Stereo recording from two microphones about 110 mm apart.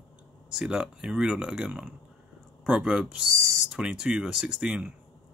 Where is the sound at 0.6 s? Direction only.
5° right (ahead or behind).